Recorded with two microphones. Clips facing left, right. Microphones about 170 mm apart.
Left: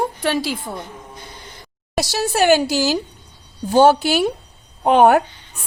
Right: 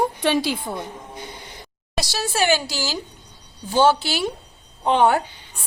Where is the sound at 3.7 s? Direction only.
45° left (ahead or behind).